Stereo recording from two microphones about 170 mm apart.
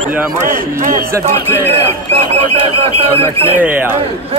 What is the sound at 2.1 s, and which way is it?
Speech, 40° right (ahead or behind).